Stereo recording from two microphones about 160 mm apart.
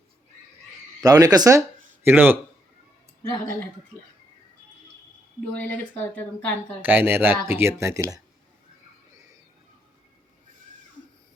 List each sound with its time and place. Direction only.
1.0 s speech: 25° right (ahead or behind)
5.5 s speech: 10° left (ahead or behind)
6.8 s speech: 10° right (ahead or behind)